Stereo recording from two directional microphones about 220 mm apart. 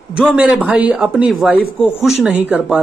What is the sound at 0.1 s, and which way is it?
Speech, 5° right (ahead or behind).